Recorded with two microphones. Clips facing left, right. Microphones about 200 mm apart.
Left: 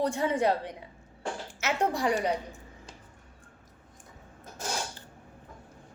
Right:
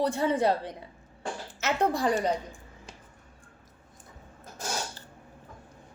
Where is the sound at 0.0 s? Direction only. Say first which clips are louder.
Right 1 dB; 15° left (ahead or behind).